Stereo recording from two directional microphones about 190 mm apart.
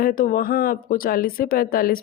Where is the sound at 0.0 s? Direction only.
45° left (ahead or behind).